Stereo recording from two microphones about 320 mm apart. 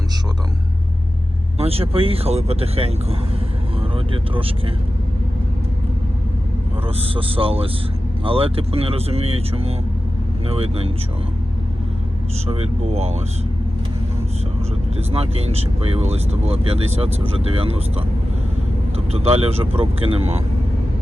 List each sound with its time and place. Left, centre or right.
1.5 s speech: centre
6.8 s speech: centre
12.5 s speech: centre
14.9 s speech: centre